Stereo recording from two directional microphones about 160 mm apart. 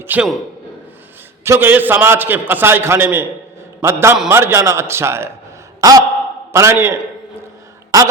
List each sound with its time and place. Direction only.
0.0 s a man's voice: 10° right (ahead or behind)
1.5 s a man's voice: 15° right (ahead or behind)
5.8 s sigh: 20° right (ahead or behind)
6.5 s a man's voice: 15° right (ahead or behind)